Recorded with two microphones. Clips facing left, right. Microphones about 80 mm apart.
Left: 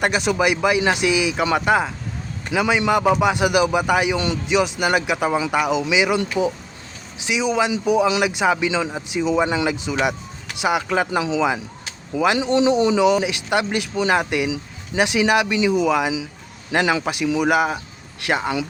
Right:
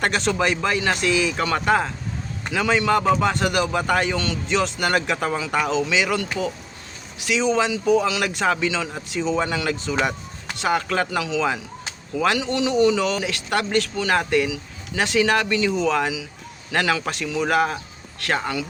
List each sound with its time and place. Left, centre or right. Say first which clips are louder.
0.0 s speech: left 2 dB; centre
12.4 s speech: left 4 dB; left